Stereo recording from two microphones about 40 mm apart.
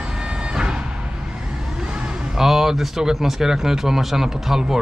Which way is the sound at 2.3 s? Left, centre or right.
Centre.